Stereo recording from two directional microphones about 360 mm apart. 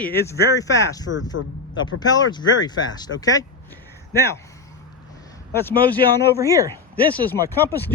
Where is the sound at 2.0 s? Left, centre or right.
Centre.